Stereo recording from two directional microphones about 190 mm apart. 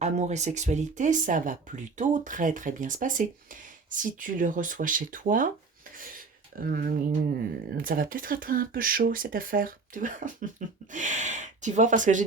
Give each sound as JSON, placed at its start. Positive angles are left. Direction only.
{"t": 0.0, "sound": "speech", "side_deg": -35}